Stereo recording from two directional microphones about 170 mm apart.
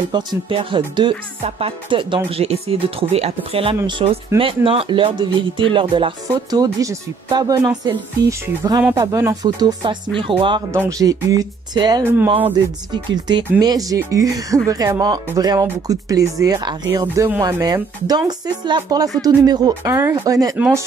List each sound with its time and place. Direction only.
0.1 s speech: 30° right (ahead or behind)
12.0 s speech: 10° right (ahead or behind)
12.9 s speech: 25° right (ahead or behind)
20.5 s speech: 10° right (ahead or behind)